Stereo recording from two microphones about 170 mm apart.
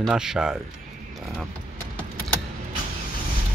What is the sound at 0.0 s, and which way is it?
Speech, 5° right (ahead or behind).